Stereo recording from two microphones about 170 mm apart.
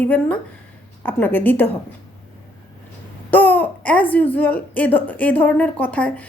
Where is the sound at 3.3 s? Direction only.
10° left (ahead or behind).